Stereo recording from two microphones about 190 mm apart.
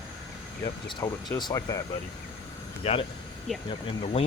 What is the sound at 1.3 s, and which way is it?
Speech, 20° left (ahead or behind).